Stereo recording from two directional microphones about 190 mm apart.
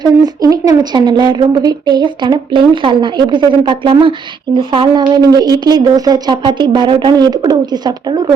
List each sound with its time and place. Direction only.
0.0 s speech: 20° right (ahead or behind)